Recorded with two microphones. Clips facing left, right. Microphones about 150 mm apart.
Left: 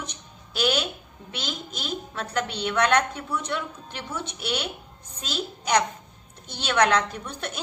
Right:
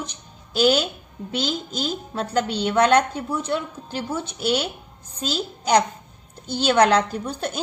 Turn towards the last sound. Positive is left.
turn(degrees=-30)  # may be behind; listen again after turning